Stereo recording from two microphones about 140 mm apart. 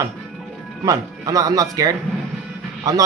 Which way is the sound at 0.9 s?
25° right (ahead or behind).